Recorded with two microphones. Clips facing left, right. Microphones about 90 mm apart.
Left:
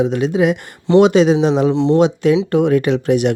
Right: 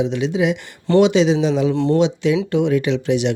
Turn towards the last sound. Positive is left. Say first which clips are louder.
# left 3 dB
turn(degrees=50)  # may be behind; listen again after turning